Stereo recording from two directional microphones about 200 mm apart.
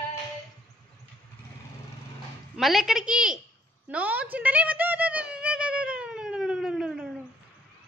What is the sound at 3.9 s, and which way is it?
Music, 10° right (ahead or behind).